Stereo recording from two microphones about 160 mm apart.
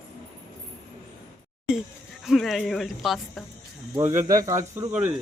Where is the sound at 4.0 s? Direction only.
20° right (ahead or behind).